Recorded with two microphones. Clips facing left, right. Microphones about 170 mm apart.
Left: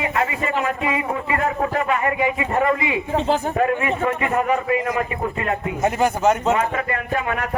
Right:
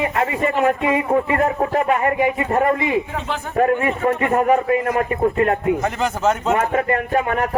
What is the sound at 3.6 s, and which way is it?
A man's voice, 45° right (ahead or behind).